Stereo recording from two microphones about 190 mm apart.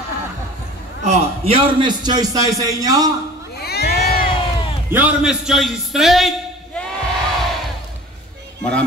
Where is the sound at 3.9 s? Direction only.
50° left (ahead or behind).